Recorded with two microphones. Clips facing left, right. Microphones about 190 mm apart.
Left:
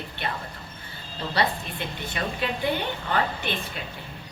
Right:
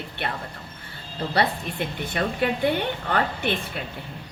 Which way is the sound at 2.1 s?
60° right (ahead or behind).